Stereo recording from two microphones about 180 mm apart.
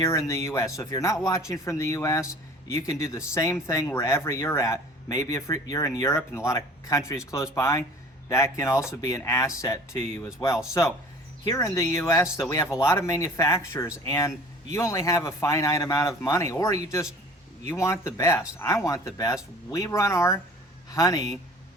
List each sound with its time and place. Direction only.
0.0 s speech: 15° left (ahead or behind)